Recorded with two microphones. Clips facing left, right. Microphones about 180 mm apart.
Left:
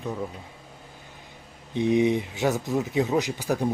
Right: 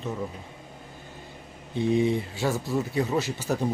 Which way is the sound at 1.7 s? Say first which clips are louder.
Left 2 dB; 20° left (ahead or behind).